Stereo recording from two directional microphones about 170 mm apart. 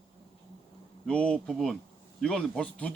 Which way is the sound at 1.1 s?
5° left (ahead or behind).